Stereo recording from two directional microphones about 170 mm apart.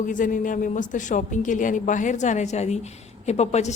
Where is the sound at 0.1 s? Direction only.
50° left (ahead or behind).